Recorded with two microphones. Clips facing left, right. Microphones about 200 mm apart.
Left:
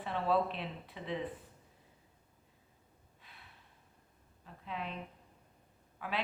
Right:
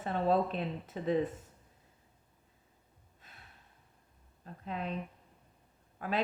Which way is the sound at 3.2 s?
45° right (ahead or behind).